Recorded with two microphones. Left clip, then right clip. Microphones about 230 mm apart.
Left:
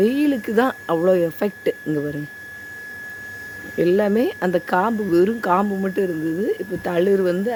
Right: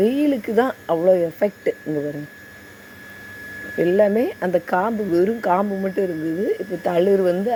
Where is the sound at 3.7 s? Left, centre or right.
Centre.